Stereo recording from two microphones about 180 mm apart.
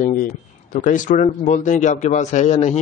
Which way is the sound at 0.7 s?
45° left (ahead or behind).